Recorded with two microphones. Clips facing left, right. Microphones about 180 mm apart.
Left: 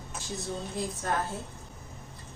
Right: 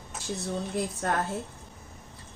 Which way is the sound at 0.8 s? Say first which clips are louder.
Right 3 dB; 70° right (ahead or behind).